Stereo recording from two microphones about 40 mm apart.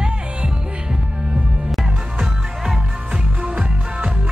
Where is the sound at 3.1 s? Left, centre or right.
Right.